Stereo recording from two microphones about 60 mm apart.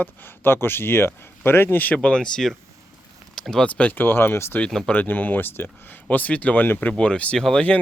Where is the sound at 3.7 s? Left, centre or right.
Left.